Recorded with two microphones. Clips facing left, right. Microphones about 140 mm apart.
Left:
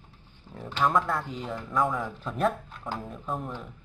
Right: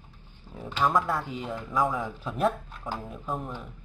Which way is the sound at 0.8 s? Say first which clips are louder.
Even; centre (ahead or behind).